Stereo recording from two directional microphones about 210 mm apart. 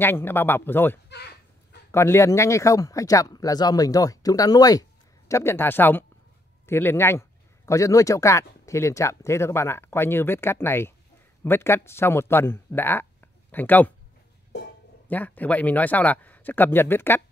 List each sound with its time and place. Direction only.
0.0 s speech: 10° left (ahead or behind)
15.0 s speech: 10° left (ahead or behind)